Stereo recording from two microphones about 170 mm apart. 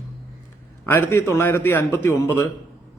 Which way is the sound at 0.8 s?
10° left (ahead or behind).